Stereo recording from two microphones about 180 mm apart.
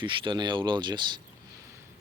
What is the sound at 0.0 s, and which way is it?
Speech, 25° right (ahead or behind).